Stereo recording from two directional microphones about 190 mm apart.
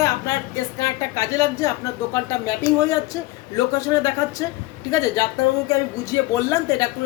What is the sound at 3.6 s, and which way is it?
A woman's voice, 20° left (ahead or behind).